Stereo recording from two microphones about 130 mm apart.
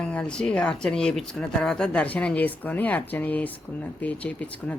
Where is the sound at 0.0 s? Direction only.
5° left (ahead or behind).